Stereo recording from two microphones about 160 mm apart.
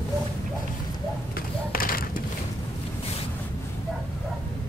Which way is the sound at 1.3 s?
65° left (ahead or behind).